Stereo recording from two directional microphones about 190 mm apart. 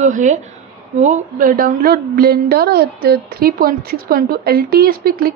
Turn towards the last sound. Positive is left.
turn(degrees=-50)  # may be behind; listen again after turning